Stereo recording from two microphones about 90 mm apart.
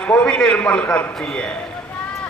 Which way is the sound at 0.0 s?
15° left (ahead or behind).